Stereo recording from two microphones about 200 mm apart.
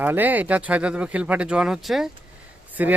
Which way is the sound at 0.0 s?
10° right (ahead or behind).